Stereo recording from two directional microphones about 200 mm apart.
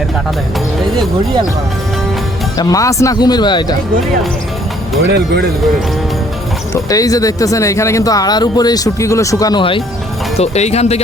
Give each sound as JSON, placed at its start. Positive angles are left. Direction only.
{"t": 2.6, "sound": "speech", "side_deg": 15}
{"t": 5.0, "sound": "speech", "side_deg": -55}
{"t": 6.9, "sound": "speech", "side_deg": 15}